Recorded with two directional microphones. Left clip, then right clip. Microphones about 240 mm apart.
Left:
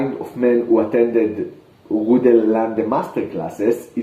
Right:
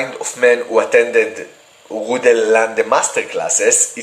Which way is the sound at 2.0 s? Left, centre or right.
Centre.